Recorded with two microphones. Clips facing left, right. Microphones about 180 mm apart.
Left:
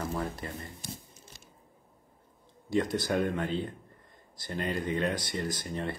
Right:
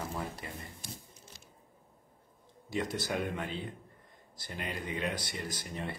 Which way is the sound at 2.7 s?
10° right (ahead or behind).